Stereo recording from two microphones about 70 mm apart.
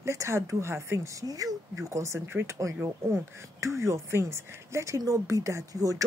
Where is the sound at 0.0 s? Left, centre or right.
Right.